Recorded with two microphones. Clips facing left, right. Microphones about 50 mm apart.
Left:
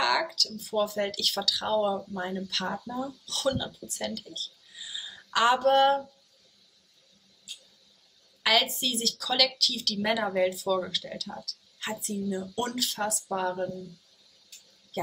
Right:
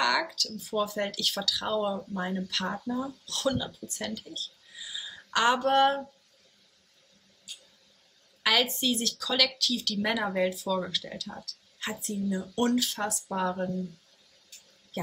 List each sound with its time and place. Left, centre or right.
0.0 s a sound: centre
0.3 s speech: centre
2.8 s speech: right
3.3 s speech: centre
4.3 s a sound: centre
5.3 s speech: centre
8.4 s speech: centre
11.8 s speech: centre
13.6 s speech: right